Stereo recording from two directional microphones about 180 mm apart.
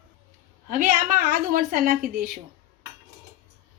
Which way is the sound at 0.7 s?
50° right (ahead or behind).